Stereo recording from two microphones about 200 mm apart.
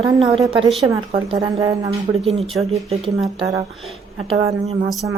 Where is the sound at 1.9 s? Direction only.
30° right (ahead or behind).